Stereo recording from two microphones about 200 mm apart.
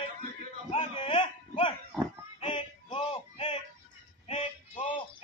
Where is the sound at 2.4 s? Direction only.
25° left (ahead or behind).